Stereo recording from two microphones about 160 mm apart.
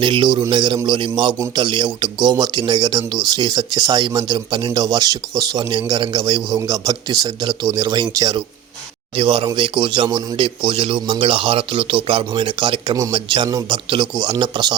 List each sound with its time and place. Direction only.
0.0 s a man's voice: 30° right (ahead or behind)